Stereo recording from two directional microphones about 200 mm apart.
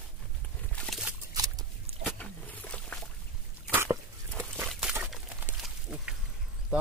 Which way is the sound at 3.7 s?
10° right (ahead or behind).